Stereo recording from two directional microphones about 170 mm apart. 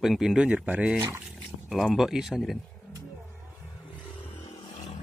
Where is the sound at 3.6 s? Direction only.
5° right (ahead or behind).